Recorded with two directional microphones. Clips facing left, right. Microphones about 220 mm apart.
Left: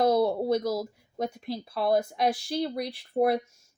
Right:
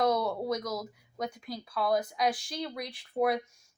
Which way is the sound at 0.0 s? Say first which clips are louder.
Left 5 dB; 30° left (ahead or behind).